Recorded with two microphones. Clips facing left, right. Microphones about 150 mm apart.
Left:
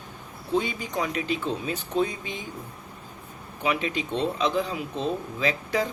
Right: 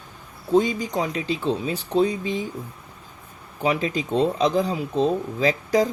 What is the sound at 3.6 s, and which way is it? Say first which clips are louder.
Speech: right 4 dB; 35° right (ahead or behind).